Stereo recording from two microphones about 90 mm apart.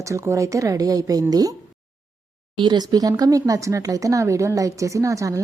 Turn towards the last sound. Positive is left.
turn(degrees=-35)  # may be behind; listen again after turning